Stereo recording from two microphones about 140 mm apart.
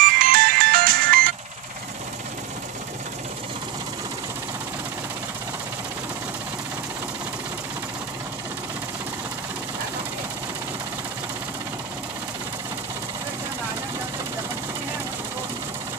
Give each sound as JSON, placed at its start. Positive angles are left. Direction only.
{"t": 0.0, "sound": "music", "side_deg": -85}